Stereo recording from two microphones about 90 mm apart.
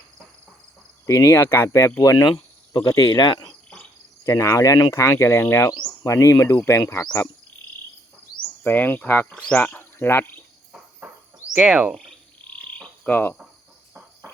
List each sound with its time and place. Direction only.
1.0 s speech: 35° left (ahead or behind)
3.1 s speech: 50° left (ahead or behind)
4.2 s speech: 35° left (ahead or behind)
8.6 s speech: 20° left (ahead or behind)
11.5 s speech: 15° right (ahead or behind)
12.5 s frog: 15° left (ahead or behind)